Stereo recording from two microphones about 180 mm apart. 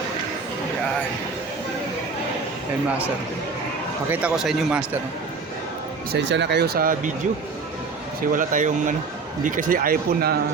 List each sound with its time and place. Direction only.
4.1 s speech: 5° right (ahead or behind)
6.1 s speech: 75° right (ahead or behind); by 7.1 s 55° right (ahead or behind)
8.3 s speech: 45° right (ahead or behind)